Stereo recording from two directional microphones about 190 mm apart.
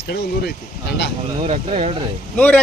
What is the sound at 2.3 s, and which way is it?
Speech, 10° left (ahead or behind).